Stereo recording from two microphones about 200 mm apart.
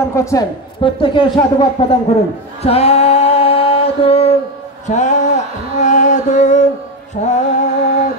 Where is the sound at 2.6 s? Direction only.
30° left (ahead or behind).